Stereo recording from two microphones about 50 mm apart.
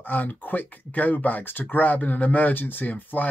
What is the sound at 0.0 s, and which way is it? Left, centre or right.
Speech, left.